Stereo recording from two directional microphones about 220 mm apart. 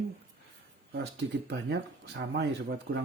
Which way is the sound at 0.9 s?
50° right (ahead or behind).